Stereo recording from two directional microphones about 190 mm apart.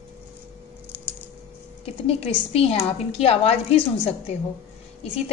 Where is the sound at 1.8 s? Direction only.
30° left (ahead or behind).